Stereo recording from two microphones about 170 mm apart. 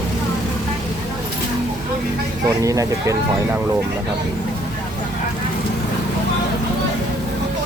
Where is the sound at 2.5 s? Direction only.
20° right (ahead or behind).